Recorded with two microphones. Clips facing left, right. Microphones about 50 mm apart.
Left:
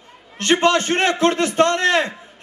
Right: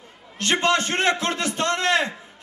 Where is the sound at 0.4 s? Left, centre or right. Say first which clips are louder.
Left 4 dB; left.